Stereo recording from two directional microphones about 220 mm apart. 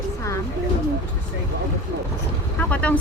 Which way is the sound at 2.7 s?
5° left (ahead or behind).